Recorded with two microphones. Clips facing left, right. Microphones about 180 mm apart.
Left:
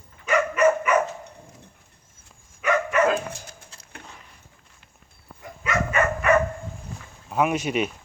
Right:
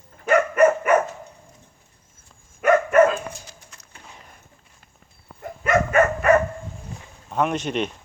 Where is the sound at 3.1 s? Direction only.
55° left (ahead or behind).